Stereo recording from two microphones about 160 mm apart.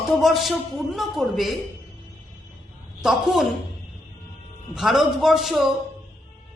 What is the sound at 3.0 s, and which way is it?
Speech, 5° right (ahead or behind).